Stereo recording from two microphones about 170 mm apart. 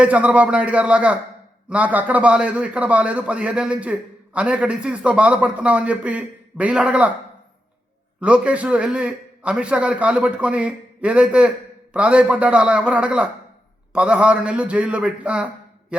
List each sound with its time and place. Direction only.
0.0 s a man's voice: 10° right (ahead or behind)
8.2 s a man's voice: 5° right (ahead or behind)